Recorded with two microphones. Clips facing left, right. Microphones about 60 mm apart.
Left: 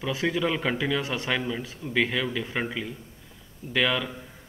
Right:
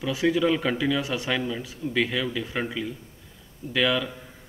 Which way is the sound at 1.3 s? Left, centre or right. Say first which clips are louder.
Right 1 dB; centre.